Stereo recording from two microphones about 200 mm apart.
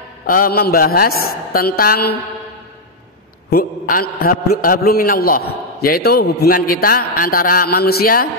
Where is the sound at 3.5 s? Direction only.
50° left (ahead or behind).